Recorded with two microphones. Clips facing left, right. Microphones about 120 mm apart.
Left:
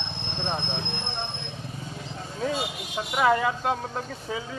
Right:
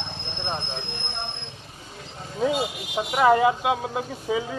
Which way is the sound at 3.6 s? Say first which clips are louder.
Right 3 dB; 10° right (ahead or behind).